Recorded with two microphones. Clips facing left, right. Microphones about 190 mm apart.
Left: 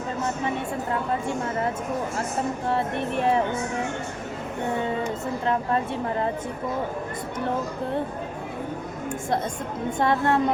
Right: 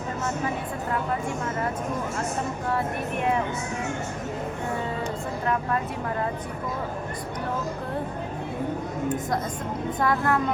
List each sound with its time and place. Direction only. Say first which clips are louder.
2.6 s speech: left 1 dB; 30° left (ahead or behind)
10.0 s a woman's voice: left 2 dB; 25° left (ahead or behind)